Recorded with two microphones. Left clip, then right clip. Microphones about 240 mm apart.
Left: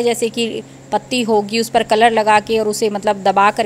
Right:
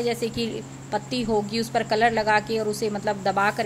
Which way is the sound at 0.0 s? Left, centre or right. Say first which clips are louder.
Left 9 dB; left.